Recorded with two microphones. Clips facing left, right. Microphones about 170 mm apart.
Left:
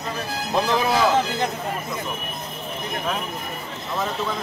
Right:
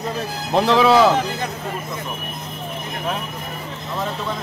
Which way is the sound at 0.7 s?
75° right (ahead or behind).